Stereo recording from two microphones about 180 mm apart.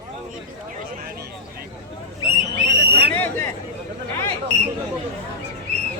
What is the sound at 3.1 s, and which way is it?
Chatter, 10° left (ahead or behind).